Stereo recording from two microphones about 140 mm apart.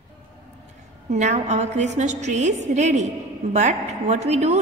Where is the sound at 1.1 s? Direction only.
55° right (ahead or behind).